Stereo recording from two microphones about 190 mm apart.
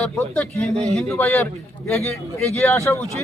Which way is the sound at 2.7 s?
15° left (ahead or behind).